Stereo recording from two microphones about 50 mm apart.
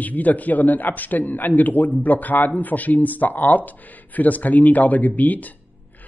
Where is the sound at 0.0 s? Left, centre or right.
Left.